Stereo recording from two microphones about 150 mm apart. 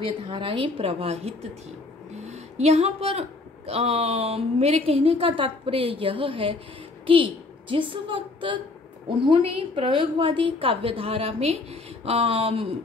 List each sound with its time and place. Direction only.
0.0 s a woman's voice: 35° right (ahead or behind)